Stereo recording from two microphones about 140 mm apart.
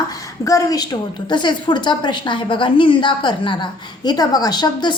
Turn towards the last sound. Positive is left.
turn(degrees=30)  # may be behind; listen again after turning